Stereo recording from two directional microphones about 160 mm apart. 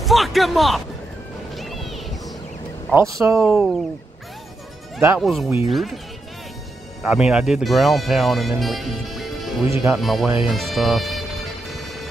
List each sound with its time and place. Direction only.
0.0 s a sound: centre (ahead or behind)
2.9 s speech: 20° right (ahead or behind)
3.4 s speech: 5° right (ahead or behind)
5.2 s speech: centre (ahead or behind)
7.0 s speech: 5° right (ahead or behind)
10.4 s music: centre (ahead or behind)